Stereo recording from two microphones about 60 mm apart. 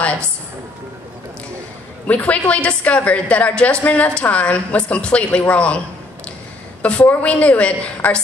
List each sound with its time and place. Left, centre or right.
2.0 s a woman's voice: left
6.8 s a woman's voice: left